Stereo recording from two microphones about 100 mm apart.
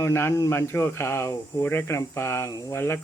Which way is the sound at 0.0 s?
25° left (ahead or behind).